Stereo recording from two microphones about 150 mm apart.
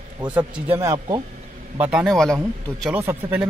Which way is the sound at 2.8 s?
10° right (ahead or behind).